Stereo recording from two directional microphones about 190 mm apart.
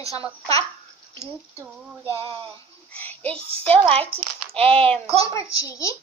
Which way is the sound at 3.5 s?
30° right (ahead or behind).